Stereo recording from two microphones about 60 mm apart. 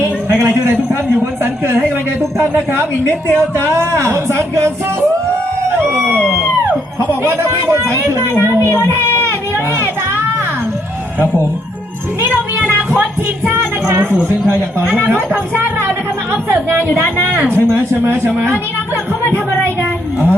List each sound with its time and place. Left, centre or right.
0.3 s speech: right
3.1 s a woman's voice: left
4.0 s speech: right
7.3 s speech: right
8.4 s a child's voice: left
13.5 s a sound: right
15.3 s speech: right
17.5 s speech: right